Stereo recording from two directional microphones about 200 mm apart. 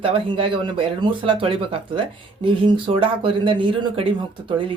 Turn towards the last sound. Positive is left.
turn(degrees=-25)  # may be behind; listen again after turning